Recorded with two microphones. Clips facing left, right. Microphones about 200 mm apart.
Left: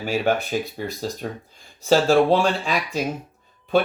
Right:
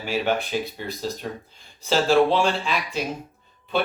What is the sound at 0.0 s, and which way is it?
Speech, 45° left (ahead or behind).